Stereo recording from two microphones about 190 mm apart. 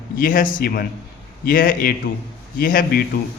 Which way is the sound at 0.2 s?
45° left (ahead or behind).